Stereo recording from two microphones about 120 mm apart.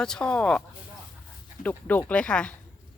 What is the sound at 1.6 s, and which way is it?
Speech, 15° left (ahead or behind).